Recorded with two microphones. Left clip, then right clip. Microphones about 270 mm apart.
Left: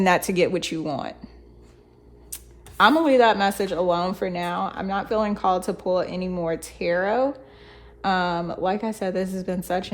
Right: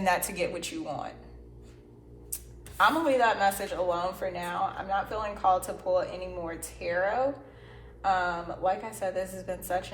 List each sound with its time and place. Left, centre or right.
0.0 s speech: left
2.3 s speech: left